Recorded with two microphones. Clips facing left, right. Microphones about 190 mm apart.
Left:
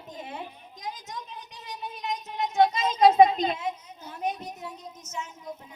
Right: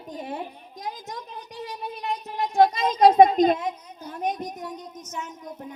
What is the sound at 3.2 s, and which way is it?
Speech, 45° right (ahead or behind).